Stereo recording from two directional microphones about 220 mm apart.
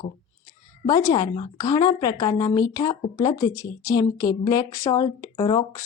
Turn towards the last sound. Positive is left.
turn(degrees=15)  # may be behind; listen again after turning